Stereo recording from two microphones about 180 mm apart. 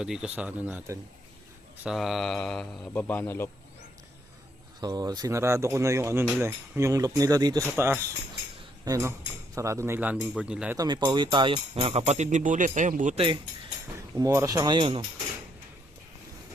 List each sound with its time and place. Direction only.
0.0 s speech: 5° right (ahead or behind); by 3.5 s 10° left (ahead or behind)
4.8 s speech: 20° right (ahead or behind); by 10.8 s 5° right (ahead or behind)
10.8 s speech: 25° right (ahead or behind); by 13.1 s 45° right (ahead or behind)
13.1 s speech: 30° right (ahead or behind)
14.2 s speech: 15° right (ahead or behind)